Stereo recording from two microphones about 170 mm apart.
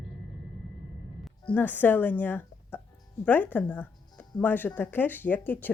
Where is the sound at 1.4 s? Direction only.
10° left (ahead or behind).